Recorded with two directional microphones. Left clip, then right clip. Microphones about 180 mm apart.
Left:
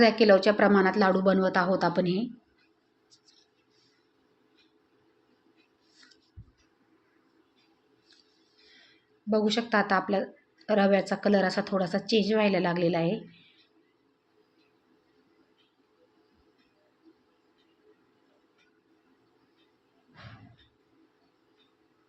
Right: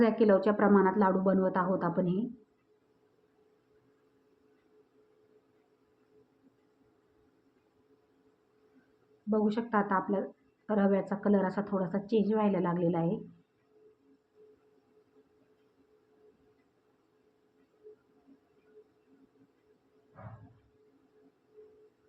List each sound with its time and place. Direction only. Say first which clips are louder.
0.0 s a woman's voice: left 5 dB; 10° left (ahead or behind)
9.3 s a woman's voice: left 4 dB; 15° left (ahead or behind)